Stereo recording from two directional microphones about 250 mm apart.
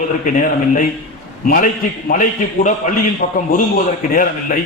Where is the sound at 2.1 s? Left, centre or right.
Left.